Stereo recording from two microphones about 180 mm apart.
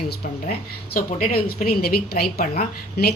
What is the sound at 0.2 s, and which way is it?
A woman's voice, 45° left (ahead or behind).